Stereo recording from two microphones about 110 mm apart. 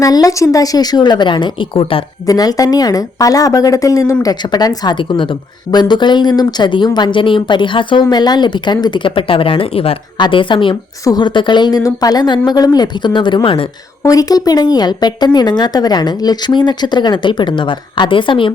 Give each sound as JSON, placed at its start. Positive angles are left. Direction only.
{"t": 0.0, "sound": "speech", "side_deg": 35}
{"t": 2.2, "sound": "speech", "side_deg": 35}
{"t": 11.0, "sound": "speech", "side_deg": 40}
{"t": 14.0, "sound": "speech", "side_deg": 35}